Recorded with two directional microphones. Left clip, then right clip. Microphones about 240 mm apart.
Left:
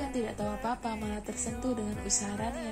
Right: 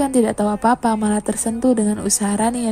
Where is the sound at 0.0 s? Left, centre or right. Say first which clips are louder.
Right 16 dB; right.